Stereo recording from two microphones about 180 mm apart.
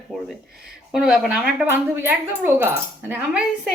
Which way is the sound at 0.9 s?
5° right (ahead or behind).